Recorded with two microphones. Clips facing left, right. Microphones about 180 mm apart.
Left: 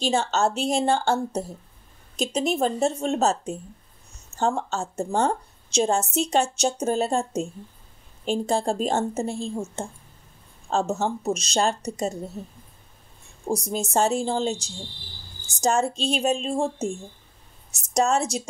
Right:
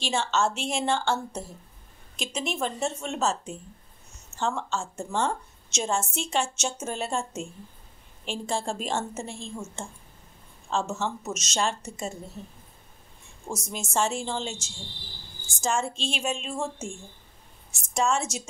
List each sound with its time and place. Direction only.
0.0 s a woman's voice: 40° left (ahead or behind)
13.5 s a woman's voice: 35° left (ahead or behind)
17.9 s a woman's voice: 40° left (ahead or behind)